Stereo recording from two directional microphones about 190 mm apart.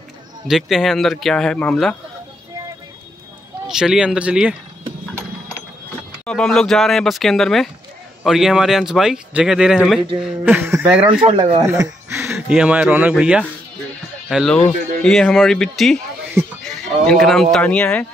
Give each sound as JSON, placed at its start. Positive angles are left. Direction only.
{"t": 0.5, "sound": "speech", "side_deg": 0}
{"t": 3.6, "sound": "speech", "side_deg": -5}
{"t": 6.2, "sound": "speech", "side_deg": 5}
{"t": 11.2, "sound": "speech", "side_deg": -25}
{"t": 11.6, "sound": "speech", "side_deg": -15}